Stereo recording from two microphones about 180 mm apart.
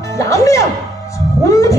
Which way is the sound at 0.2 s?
15° left (ahead or behind).